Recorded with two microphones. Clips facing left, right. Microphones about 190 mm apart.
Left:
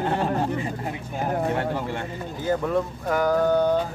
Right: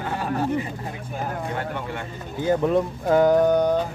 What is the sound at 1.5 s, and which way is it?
Speech, 30° left (ahead or behind).